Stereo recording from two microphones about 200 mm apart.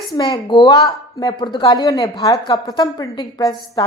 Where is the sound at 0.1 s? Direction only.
20° left (ahead or behind).